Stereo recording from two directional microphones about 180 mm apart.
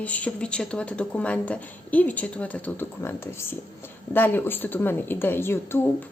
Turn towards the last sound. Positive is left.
turn(degrees=10)  # may be behind; listen again after turning